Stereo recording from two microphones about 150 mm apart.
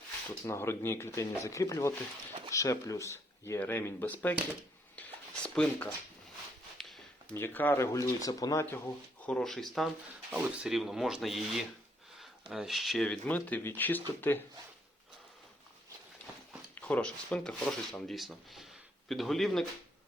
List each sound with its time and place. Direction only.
0.4 s speech: 20° left (ahead or behind)
4.9 s a sound: 10° left (ahead or behind)
7.3 s speech: 15° left (ahead or behind)
9.2 s speech: 5° left (ahead or behind)
16.7 s speech: 10° left (ahead or behind)